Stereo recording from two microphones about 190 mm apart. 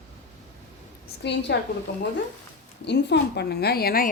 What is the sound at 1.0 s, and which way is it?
Speech, 65° left (ahead or behind).